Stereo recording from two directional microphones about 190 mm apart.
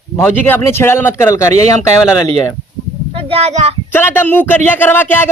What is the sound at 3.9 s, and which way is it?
Speech, 10° left (ahead or behind).